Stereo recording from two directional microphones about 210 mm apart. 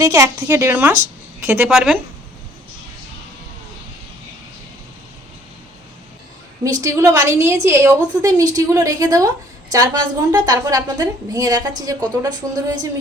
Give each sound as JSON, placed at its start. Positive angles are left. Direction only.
{"t": 0.0, "sound": "a woman's voice", "side_deg": -15}
{"t": 6.7, "sound": "a woman's voice", "side_deg": -15}